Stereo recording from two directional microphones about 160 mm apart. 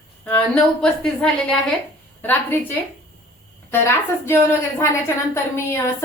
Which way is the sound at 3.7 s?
15° left (ahead or behind).